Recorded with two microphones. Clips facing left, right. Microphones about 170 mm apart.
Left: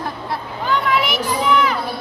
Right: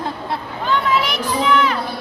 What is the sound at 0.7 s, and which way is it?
Children playing, centre (ahead or behind).